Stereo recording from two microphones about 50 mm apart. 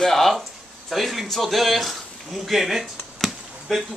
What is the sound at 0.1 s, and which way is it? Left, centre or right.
A man's voice, centre.